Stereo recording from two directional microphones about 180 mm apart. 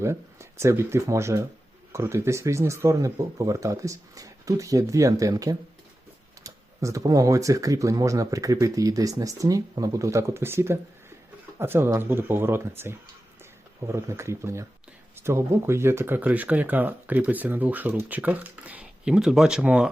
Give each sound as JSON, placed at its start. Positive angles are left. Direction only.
{"t": 0.0, "sound": "speech", "side_deg": -15}